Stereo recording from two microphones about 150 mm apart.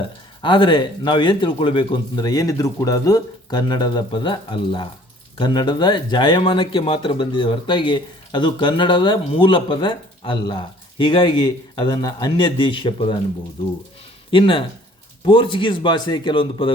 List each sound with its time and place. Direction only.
0.4 s speech: 30° left (ahead or behind)
14.3 s speech: 35° left (ahead or behind)